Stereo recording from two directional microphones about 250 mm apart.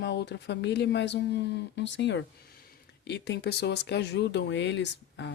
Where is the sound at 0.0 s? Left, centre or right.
Left.